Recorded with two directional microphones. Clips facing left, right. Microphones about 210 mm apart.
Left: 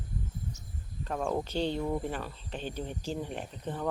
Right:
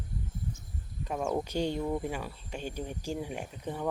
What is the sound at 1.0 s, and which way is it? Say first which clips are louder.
Speech: even; 10° right (ahead or behind).